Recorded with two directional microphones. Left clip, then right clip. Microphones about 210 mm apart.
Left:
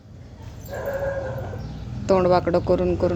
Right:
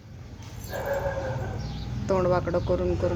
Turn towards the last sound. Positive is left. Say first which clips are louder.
# left 5 dB
turn(degrees=20)  # may be behind; listen again after turning